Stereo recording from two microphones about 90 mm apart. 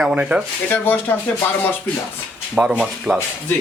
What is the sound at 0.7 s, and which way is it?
Speech, 20° left (ahead or behind).